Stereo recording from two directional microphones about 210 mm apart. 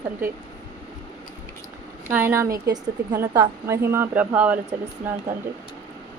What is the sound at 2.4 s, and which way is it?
Speech, 45° right (ahead or behind).